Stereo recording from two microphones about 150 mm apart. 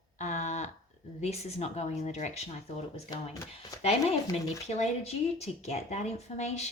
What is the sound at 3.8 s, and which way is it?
Speech, 45° left (ahead or behind).